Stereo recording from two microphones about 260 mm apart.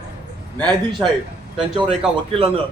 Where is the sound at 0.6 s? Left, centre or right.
Centre.